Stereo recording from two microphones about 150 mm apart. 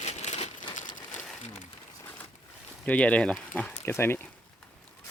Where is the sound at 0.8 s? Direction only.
30° left (ahead or behind).